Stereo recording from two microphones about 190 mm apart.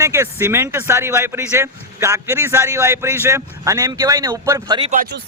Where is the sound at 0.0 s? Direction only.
15° right (ahead or behind).